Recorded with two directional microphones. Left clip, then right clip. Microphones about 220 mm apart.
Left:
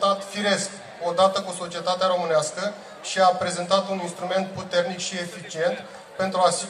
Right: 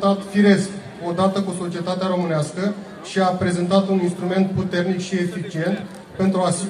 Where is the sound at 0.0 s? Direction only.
40° left (ahead or behind).